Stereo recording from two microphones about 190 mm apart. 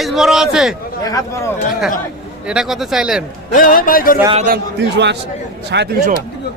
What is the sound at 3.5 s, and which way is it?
Speech, 45° left (ahead or behind).